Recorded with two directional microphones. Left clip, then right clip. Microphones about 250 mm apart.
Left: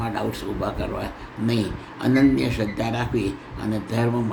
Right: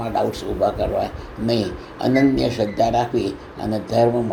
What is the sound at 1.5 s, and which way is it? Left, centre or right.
Speech, left.